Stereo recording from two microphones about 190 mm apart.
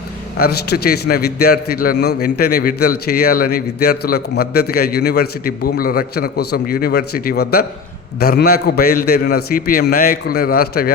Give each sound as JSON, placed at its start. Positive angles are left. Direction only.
{"t": 0.3, "sound": "a man's voice", "side_deg": 55}